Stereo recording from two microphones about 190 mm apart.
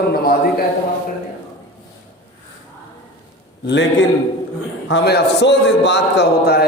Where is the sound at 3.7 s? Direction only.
70° left (ahead or behind).